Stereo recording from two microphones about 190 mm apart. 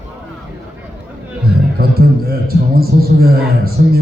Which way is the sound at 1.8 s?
55° right (ahead or behind).